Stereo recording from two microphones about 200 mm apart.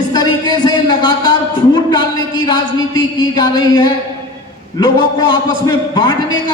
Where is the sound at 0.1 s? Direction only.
20° left (ahead or behind).